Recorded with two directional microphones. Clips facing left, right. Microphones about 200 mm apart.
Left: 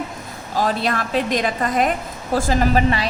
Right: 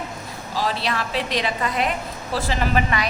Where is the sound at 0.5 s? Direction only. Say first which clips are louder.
Left 4 dB; 50° left (ahead or behind).